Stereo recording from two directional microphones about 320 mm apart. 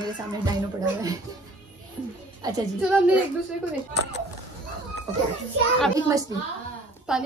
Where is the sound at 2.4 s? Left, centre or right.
Centre.